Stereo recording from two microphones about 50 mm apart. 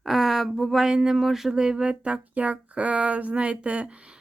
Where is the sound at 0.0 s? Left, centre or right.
Centre.